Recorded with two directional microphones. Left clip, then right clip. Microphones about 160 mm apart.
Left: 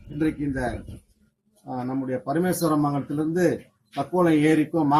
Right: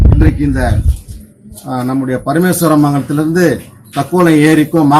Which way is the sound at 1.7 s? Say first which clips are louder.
Right 12 dB; centre (ahead or behind).